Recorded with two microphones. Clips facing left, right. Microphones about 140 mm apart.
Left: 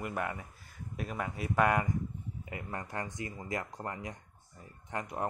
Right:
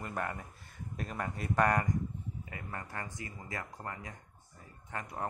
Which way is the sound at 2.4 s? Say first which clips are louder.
Left 6 dB; 20° left (ahead or behind).